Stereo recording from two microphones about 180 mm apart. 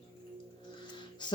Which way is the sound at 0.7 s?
25° left (ahead or behind).